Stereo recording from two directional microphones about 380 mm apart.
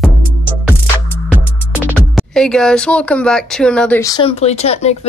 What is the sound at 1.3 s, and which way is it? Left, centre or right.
Speech, centre.